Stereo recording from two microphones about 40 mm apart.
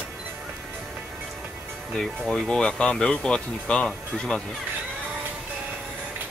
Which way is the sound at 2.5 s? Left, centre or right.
Centre.